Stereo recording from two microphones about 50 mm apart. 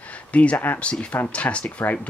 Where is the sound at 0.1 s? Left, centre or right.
Left.